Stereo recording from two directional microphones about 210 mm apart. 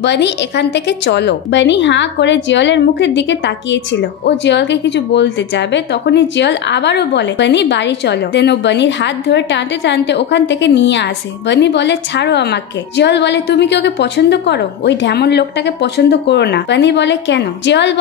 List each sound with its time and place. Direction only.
0.0 s a woman's voice: 55° left (ahead or behind)